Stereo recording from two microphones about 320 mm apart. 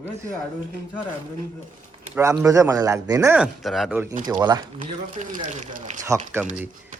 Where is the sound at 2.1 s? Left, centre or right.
Centre.